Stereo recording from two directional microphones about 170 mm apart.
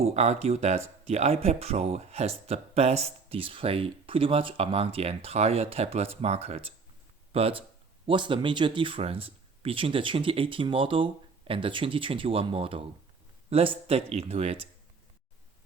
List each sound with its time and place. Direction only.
0.0 s speech: 40° right (ahead or behind)